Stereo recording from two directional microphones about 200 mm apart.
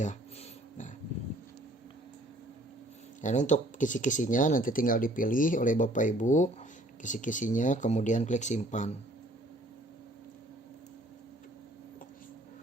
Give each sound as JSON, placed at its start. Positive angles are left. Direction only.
{"t": 3.2, "sound": "speech", "side_deg": 35}